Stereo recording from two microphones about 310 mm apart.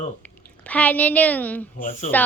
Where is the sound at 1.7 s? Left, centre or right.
Left.